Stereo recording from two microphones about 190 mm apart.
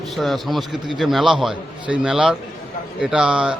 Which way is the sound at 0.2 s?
Centre (ahead or behind).